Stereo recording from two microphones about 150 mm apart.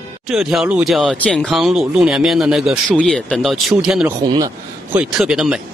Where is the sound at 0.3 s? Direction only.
Centre (ahead or behind).